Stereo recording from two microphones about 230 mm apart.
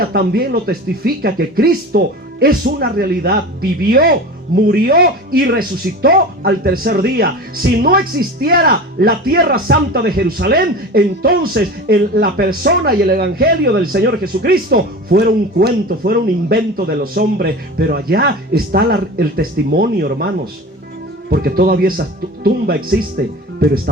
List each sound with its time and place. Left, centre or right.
0.0 s speech: right